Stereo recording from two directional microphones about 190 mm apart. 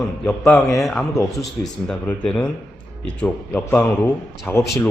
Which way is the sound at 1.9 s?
5° left (ahead or behind).